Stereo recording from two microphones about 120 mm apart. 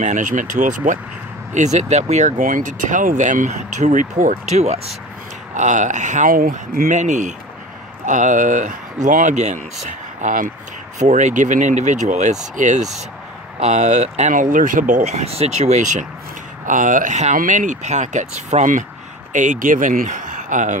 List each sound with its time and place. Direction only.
0.0 s speech: 90° right; by 4.9 s 65° right (ahead or behind)
5.5 s speech: 90° right
9.8 s speech: 90° right